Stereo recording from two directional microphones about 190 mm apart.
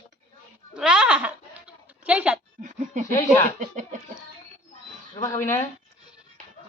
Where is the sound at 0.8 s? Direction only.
5° right (ahead or behind).